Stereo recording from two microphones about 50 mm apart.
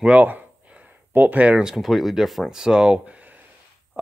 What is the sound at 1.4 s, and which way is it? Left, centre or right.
Speech, right.